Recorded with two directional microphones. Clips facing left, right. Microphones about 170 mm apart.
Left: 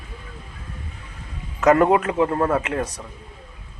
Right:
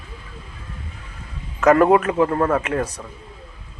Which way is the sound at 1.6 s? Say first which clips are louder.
Right 2 dB; 20° left (ahead or behind).